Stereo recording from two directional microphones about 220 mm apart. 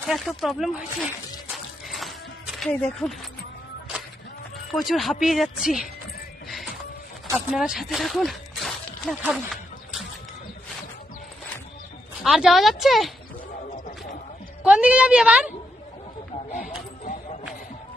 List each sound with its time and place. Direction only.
0.0 s speech: centre (ahead or behind)
1.5 s music: centre (ahead or behind)
4.7 s speech: centre (ahead or behind)
7.3 s a sound: 5° right (ahead or behind)
12.2 s speech: centre (ahead or behind)
14.6 s speech: 5° right (ahead or behind)
16.5 s a sound: 35° left (ahead or behind)